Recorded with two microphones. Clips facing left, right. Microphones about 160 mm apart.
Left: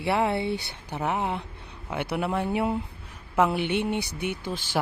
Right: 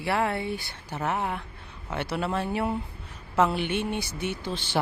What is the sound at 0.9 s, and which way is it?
Speech, 15° left (ahead or behind).